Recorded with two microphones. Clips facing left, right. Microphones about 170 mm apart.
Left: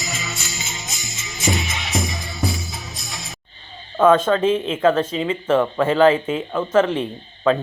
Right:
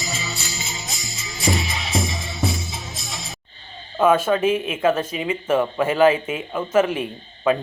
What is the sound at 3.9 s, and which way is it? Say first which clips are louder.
Speech: left 2 dB; 10° right (ahead or behind).